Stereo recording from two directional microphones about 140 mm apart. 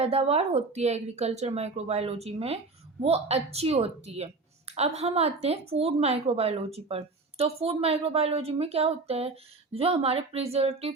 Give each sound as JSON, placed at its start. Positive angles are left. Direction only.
{"t": 0.0, "sound": "a woman's voice", "side_deg": -45}